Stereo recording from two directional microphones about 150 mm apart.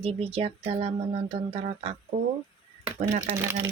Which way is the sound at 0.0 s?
40° right (ahead or behind).